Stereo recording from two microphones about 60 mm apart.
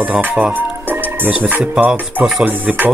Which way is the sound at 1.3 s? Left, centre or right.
Right.